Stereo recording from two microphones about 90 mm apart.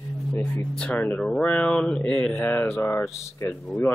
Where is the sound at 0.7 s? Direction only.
15° left (ahead or behind).